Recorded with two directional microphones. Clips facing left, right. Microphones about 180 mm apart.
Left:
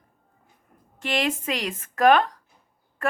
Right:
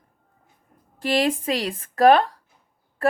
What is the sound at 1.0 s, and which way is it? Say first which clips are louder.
Speech: right 4 dB; 35° right (ahead or behind).